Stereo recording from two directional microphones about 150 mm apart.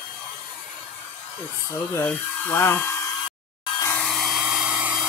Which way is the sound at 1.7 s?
15° left (ahead or behind).